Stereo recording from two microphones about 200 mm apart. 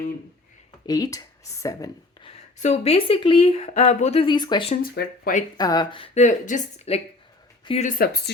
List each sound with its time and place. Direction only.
0.9 s speech: 20° left (ahead or behind)
2.3 s speech: 35° left (ahead or behind)
4.7 s speech: 45° left (ahead or behind)
5.5 s a woman's voice: 20° left (ahead or behind)
7.9 s speech: 45° left (ahead or behind)